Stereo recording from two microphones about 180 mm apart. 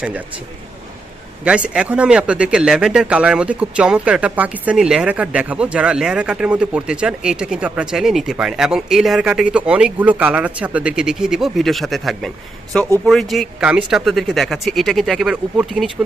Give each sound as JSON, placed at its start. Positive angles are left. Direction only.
{"t": 1.5, "sound": "speech", "side_deg": -5}